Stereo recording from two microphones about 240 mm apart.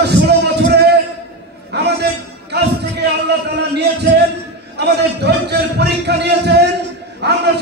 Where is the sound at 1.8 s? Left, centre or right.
Right.